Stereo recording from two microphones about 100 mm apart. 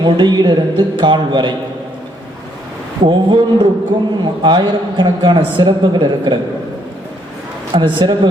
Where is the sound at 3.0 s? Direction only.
55° right (ahead or behind).